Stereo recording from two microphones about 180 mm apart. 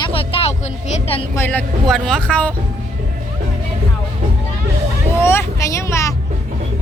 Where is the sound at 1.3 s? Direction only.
10° left (ahead or behind).